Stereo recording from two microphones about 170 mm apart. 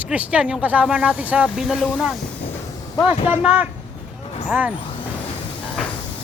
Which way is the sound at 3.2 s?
10° right (ahead or behind).